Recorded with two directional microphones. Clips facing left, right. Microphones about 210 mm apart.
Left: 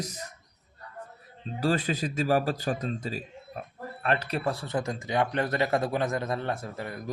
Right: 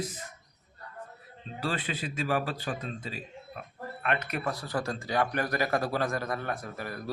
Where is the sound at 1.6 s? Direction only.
40° left (ahead or behind).